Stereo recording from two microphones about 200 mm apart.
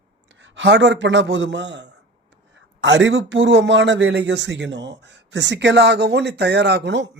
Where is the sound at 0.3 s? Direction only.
70° right (ahead or behind).